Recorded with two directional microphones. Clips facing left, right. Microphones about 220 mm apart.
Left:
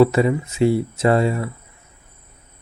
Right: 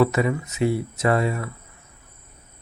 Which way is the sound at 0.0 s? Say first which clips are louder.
Left 5 dB; 30° left (ahead or behind).